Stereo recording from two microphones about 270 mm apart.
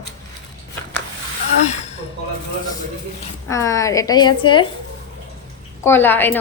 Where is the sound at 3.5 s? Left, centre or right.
Centre.